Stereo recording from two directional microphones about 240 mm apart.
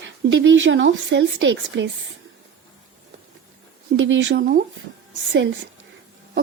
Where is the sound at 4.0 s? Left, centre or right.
Right.